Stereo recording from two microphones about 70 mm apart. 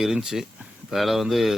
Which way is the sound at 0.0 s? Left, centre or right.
Centre.